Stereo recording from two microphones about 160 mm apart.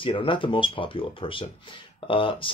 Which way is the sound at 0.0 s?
30° left (ahead or behind).